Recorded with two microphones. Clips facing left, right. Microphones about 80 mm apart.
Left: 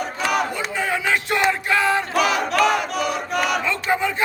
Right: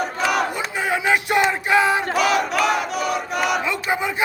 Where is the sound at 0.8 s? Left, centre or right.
Centre.